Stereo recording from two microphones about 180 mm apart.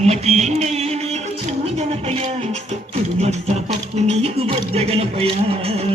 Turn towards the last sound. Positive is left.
turn(degrees=-35)  # may be behind; listen again after turning